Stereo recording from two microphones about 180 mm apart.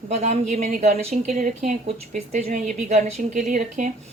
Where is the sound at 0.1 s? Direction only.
40° right (ahead or behind).